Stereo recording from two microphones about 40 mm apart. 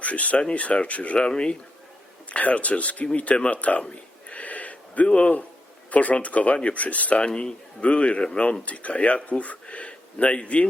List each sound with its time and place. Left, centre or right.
0.0 s speech: left
1.3 s speech: left
2.3 s speech: left
3.8 s a sound: left
5.9 s speech: left
7.3 s speech: left